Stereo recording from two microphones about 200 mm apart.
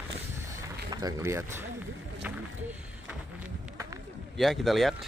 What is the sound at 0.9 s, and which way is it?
Speech, 20° right (ahead or behind).